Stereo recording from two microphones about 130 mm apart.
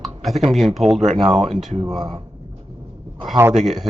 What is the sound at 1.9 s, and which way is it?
Speech, 30° right (ahead or behind).